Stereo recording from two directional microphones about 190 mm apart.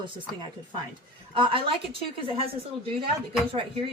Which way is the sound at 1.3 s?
25° right (ahead or behind).